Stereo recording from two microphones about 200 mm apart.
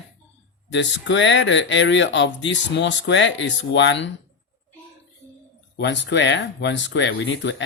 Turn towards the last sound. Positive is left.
turn(degrees=65)  # may be behind; listen again after turning